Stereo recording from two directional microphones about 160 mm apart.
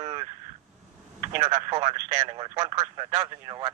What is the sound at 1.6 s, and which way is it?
Speech, 25° right (ahead or behind).